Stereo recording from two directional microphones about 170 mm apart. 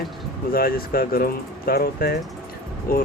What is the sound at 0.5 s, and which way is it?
Speech, 60° left (ahead or behind).